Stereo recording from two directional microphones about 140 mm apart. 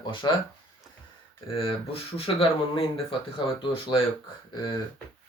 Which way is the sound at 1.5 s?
40° left (ahead or behind).